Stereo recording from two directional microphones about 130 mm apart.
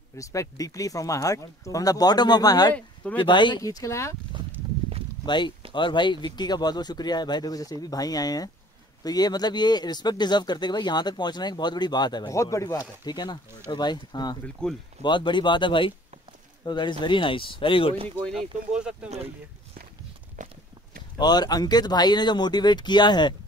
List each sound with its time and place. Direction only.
0.2 s speech: 25° left (ahead or behind)
2.7 s speech: 10° left (ahead or behind)
3.2 s speech: 35° left (ahead or behind)
5.2 s speech: 35° left (ahead or behind)
14.4 s speech: 5° left (ahead or behind)
15.0 s speech: 35° left (ahead or behind)
18.3 s speech: 5° right (ahead or behind)
20.4 s clip-clop: 75° right (ahead or behind)
21.2 s speech: 30° left (ahead or behind)